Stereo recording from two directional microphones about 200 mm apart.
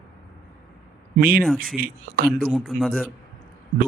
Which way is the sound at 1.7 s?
45° right (ahead or behind).